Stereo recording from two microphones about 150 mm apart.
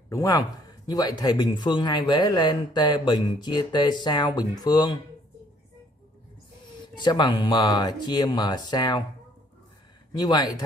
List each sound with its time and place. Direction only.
0.1 s speech: 25° left (ahead or behind)
7.0 s speech: 30° left (ahead or behind)
10.2 s speech: 25° left (ahead or behind)